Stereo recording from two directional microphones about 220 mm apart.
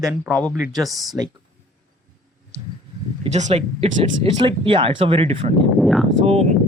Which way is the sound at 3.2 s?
30° right (ahead or behind).